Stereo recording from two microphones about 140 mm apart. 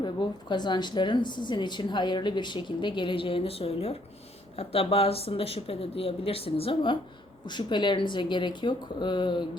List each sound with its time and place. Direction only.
0.0 s a woman's voice: 35° left (ahead or behind)